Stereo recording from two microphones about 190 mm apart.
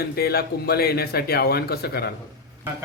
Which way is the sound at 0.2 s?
55° left (ahead or behind).